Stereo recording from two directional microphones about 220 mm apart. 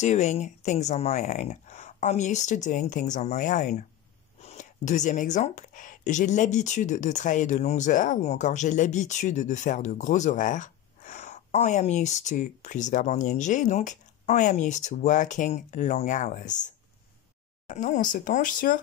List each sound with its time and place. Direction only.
0.0 s speech: 30° left (ahead or behind)